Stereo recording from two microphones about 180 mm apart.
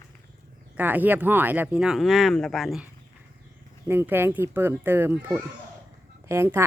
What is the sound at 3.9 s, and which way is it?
A woman's voice, 10° right (ahead or behind).